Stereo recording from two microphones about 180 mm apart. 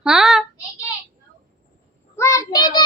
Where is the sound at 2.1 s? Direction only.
15° left (ahead or behind).